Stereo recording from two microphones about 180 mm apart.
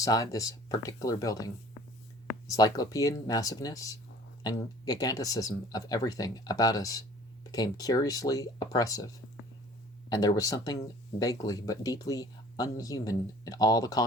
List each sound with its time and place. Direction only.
0.0 s speech: 20° left (ahead or behind)
10.1 s speech: 20° left (ahead or behind)